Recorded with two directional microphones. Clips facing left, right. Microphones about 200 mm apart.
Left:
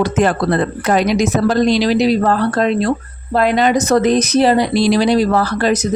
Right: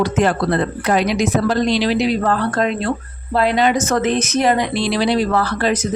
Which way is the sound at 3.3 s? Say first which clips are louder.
Left 2 dB; 45° left (ahead or behind).